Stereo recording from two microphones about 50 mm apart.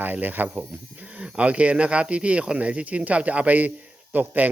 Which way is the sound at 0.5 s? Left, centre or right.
Right.